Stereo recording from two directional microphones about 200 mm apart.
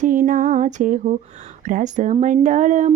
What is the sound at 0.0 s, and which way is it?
Speech, 40° right (ahead or behind).